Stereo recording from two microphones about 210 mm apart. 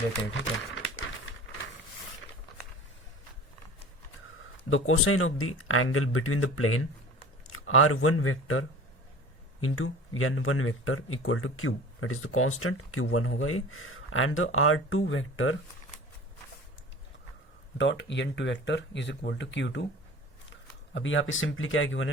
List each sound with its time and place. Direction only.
0.1 s speech: 60° left (ahead or behind)
4.7 s speech: 80° left
17.7 s speech: 60° left (ahead or behind)